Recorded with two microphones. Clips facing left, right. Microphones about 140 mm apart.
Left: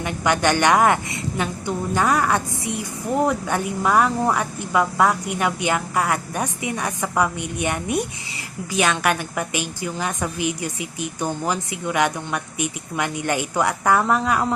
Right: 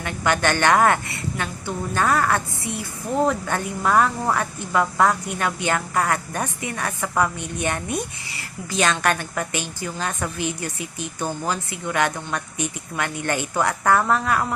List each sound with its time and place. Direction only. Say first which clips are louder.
0.0 s a woman's voice: left 2 dB; 15° left (ahead or behind)